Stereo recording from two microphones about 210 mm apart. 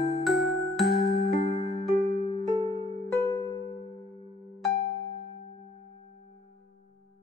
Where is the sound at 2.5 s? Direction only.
20° right (ahead or behind).